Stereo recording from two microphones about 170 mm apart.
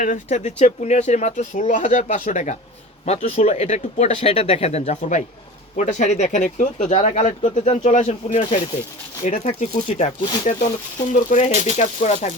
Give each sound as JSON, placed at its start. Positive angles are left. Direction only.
{"t": 0.0, "sound": "speech", "side_deg": 45}
{"t": 8.4, "sound": "speech", "side_deg": 30}
{"t": 9.2, "sound": "speech", "side_deg": 40}